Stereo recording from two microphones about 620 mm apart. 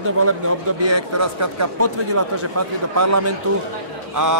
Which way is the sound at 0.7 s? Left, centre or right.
Right.